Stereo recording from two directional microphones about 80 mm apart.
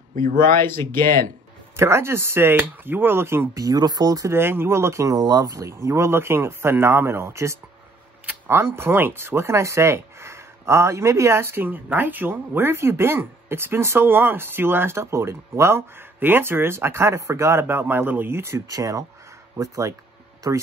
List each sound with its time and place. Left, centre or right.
0.4 s speech: left
1.8 s speech: right
3.6 s speech: right
4.3 s speech: right
5.2 s speech: right
5.5 s speech: right
18.7 s speech: right